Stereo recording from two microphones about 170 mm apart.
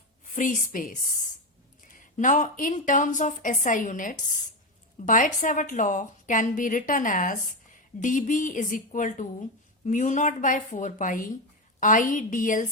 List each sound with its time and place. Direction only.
0.3 s a woman's voice: 50° left (ahead or behind)